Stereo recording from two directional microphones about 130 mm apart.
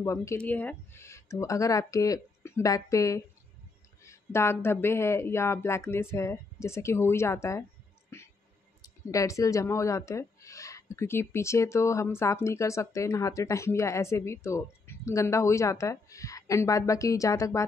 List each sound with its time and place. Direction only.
0.0 s speech: 20° left (ahead or behind)
8.1 s music: 20° left (ahead or behind)
8.8 s speech: 25° left (ahead or behind)